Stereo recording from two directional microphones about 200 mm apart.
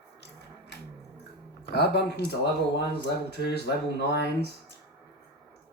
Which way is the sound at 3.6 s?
55° left (ahead or behind).